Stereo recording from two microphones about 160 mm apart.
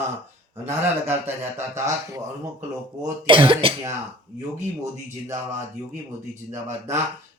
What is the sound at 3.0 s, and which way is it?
Speech, 30° right (ahead or behind).